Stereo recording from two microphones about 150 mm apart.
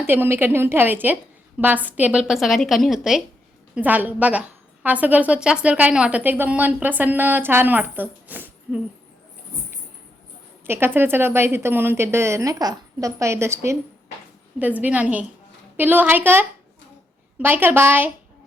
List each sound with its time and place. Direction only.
0.0 s a woman's voice: 15° right (ahead or behind)
10.7 s a woman's voice: 15° right (ahead or behind)